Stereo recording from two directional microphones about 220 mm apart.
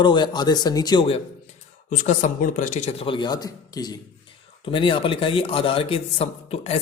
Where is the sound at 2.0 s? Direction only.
35° left (ahead or behind).